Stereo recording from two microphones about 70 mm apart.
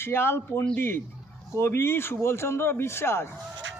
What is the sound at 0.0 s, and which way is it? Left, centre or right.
Speech, left.